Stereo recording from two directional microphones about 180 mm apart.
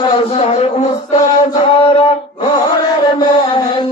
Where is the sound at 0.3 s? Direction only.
35° left (ahead or behind).